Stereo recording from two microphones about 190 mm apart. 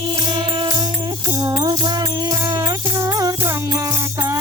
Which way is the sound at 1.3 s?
20° right (ahead or behind).